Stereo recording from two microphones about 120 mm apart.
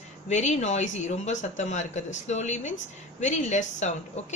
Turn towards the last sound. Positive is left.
turn(degrees=80)